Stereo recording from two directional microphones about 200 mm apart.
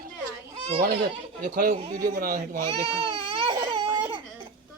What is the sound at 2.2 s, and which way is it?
Speech, 45° right (ahead or behind).